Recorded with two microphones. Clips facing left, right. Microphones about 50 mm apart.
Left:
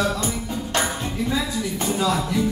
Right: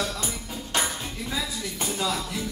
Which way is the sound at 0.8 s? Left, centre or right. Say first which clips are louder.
Left 7 dB; centre.